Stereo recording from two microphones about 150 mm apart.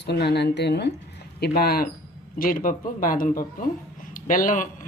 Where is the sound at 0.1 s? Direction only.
90° left.